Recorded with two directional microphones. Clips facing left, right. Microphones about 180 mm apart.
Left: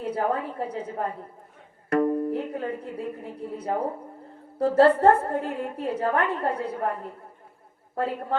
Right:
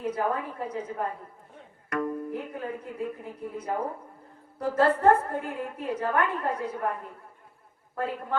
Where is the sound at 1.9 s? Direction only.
30° left (ahead or behind).